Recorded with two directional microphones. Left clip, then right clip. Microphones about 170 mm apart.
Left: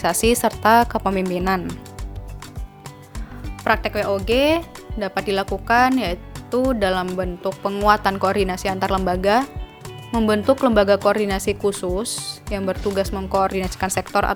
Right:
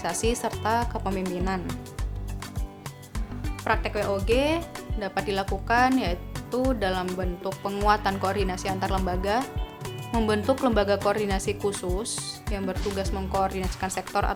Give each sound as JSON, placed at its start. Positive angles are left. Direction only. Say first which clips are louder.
{"t": 0.0, "sound": "speech", "louder": "left 9 dB", "side_deg": 45}
{"t": 3.6, "sound": "speech", "louder": "left 6 dB", "side_deg": 45}
{"t": 6.0, "sound": "music", "louder": "left 5 dB", "side_deg": 40}
{"t": 6.7, "sound": "speech", "louder": "left 6 dB", "side_deg": 40}